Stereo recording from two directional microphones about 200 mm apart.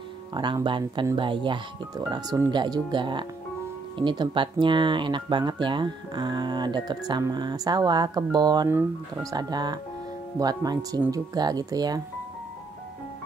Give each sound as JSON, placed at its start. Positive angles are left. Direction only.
{"t": 0.3, "sound": "speech", "side_deg": -20}